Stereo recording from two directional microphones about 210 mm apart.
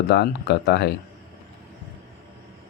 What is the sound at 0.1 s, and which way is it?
Speech, 50° left (ahead or behind).